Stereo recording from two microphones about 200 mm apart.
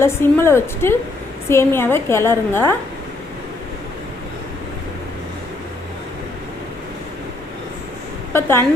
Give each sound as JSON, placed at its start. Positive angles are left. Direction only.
{"t": 0.0, "sound": "a woman's voice", "side_deg": 10}
{"t": 8.3, "sound": "speech", "side_deg": 10}